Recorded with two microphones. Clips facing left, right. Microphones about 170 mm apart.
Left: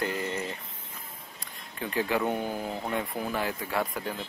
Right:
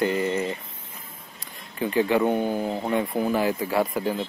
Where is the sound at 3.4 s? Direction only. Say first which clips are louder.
Right 7 dB; 10° right (ahead or behind).